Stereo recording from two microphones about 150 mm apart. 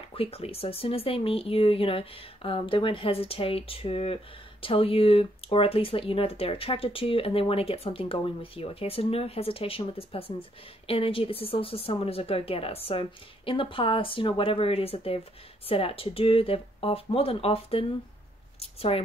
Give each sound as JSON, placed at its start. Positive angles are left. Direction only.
{"t": 0.1, "sound": "speech", "side_deg": 40}